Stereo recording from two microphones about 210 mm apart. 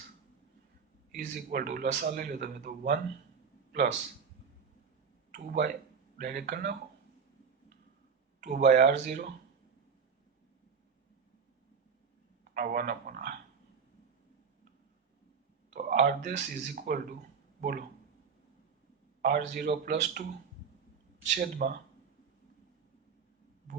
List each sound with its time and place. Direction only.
1.1 s a man's voice: 40° right (ahead or behind)
5.3 s speech: 45° right (ahead or behind)
8.4 s speech: 45° right (ahead or behind)
12.5 s a man's voice: 45° right (ahead or behind)
15.7 s speech: 45° right (ahead or behind)
19.2 s speech: 40° right (ahead or behind)
21.3 s a man's voice: 40° right (ahead or behind)